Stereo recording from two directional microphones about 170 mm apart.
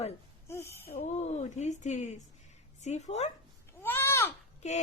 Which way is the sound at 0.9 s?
40° left (ahead or behind).